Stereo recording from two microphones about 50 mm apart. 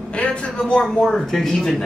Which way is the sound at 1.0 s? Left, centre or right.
Centre.